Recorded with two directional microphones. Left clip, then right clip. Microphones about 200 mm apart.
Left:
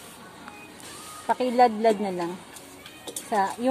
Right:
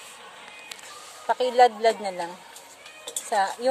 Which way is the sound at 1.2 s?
15° right (ahead or behind).